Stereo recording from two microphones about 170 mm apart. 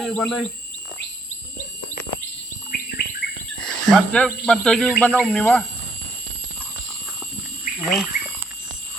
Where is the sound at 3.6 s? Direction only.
5° left (ahead or behind).